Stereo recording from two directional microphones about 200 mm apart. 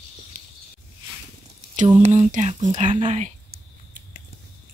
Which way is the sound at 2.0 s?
35° right (ahead or behind).